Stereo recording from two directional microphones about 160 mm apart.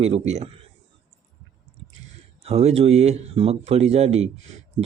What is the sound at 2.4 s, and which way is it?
Speech, 40° right (ahead or behind).